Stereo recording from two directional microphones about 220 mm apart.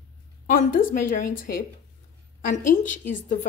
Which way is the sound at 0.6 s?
40° left (ahead or behind).